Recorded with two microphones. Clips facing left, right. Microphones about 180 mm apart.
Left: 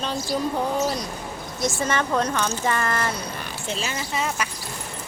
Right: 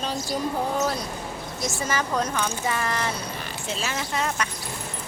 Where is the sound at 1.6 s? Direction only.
5° right (ahead or behind).